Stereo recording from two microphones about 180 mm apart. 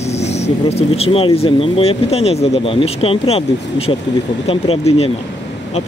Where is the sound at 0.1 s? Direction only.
35° left (ahead or behind).